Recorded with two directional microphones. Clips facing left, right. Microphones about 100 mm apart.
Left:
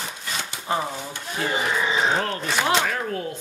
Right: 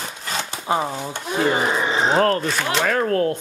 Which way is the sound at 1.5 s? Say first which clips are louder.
Right 3 dB; 40° right (ahead or behind).